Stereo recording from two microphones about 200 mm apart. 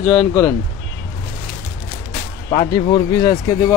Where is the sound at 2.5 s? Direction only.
25° left (ahead or behind).